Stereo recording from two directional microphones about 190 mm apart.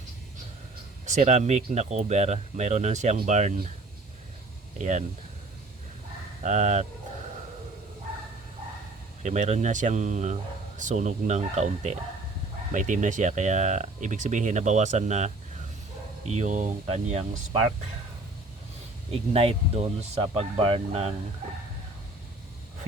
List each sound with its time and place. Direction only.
1.0 s speech: 40° right (ahead or behind)
4.8 s speech: 40° right (ahead or behind)
6.4 s speech: 40° right (ahead or behind)
9.2 s speech: 40° right (ahead or behind)
19.1 s speech: 30° right (ahead or behind)